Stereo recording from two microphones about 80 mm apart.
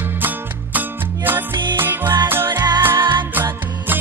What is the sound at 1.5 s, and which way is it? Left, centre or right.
Music, right.